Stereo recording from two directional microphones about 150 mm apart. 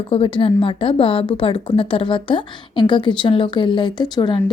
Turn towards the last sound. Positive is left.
turn(degrees=30)  # may be behind; listen again after turning